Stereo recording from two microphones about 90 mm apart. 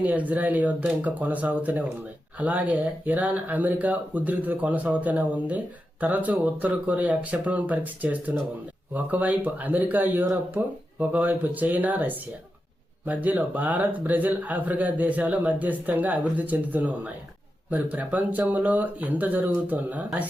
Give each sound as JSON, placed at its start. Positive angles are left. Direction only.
{"t": 0.0, "sound": "speech", "side_deg": -20}